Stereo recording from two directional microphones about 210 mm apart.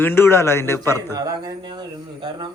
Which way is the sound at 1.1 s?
15° right (ahead or behind).